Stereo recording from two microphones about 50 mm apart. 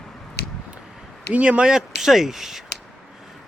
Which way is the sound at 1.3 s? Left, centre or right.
Right.